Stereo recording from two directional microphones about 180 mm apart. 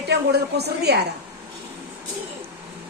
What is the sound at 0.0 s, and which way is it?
A woman's voice, 65° right (ahead or behind).